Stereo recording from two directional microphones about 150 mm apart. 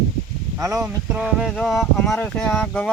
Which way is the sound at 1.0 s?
5° right (ahead or behind).